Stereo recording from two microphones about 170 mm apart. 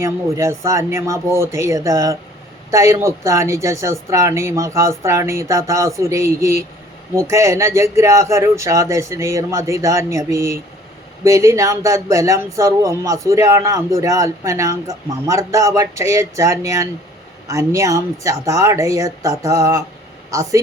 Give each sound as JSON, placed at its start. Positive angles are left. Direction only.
{"t": 0.0, "sound": "a man's voice", "side_deg": -15}